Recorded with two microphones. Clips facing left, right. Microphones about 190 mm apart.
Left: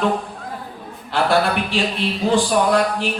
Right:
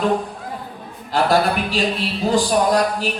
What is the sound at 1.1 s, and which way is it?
A man's voice, 40° right (ahead or behind).